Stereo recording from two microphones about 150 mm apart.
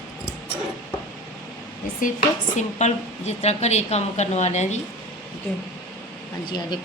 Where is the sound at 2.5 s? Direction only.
50° left (ahead or behind).